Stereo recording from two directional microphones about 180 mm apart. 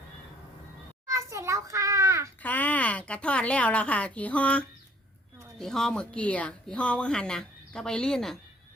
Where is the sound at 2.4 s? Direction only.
10° left (ahead or behind).